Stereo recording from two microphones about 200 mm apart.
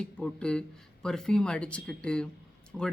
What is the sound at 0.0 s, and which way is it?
Speech, 5° left (ahead or behind).